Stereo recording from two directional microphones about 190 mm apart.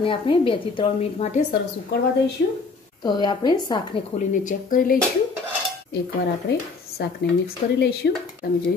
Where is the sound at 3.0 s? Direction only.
25° left (ahead or behind).